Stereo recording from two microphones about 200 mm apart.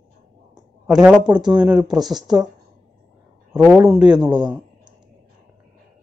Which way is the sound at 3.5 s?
5° right (ahead or behind).